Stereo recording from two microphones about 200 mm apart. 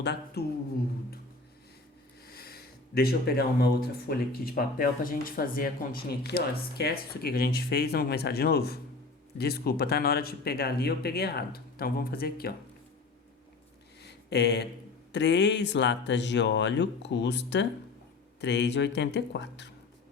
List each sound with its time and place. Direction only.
0.0 s speech: 60° left (ahead or behind)
2.2 s speech: 50° left (ahead or behind)
14.0 s a sound: 55° left (ahead or behind)
15.1 s speech: 60° left (ahead or behind)